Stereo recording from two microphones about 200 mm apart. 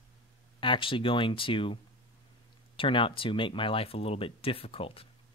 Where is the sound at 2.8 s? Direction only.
25° left (ahead or behind).